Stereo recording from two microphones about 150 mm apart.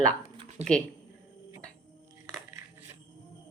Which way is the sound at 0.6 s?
45° right (ahead or behind).